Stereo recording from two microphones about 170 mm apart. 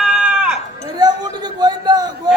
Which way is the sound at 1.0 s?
25° right (ahead or behind).